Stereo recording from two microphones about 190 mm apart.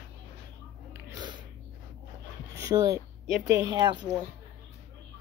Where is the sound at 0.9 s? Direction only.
20° right (ahead or behind).